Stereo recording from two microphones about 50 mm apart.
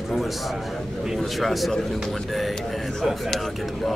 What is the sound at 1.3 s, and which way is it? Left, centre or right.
A man's voice, centre.